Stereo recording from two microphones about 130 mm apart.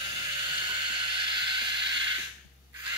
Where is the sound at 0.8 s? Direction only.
40° right (ahead or behind).